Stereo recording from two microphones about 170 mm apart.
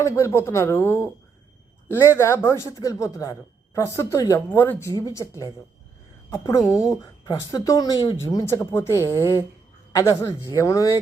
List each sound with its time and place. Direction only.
0.0 s speech: 15° left (ahead or behind)